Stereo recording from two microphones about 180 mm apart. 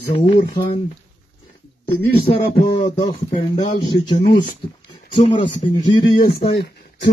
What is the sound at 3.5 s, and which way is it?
Speech, 45° left (ahead or behind).